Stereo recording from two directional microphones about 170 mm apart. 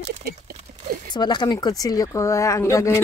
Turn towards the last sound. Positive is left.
turn(degrees=15)  # may be behind; listen again after turning